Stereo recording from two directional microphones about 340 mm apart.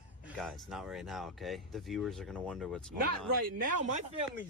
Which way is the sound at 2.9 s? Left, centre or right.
Right.